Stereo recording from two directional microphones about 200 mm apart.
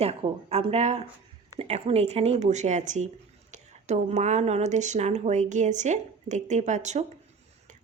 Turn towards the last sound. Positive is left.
turn(degrees=-35)  # may be behind; listen again after turning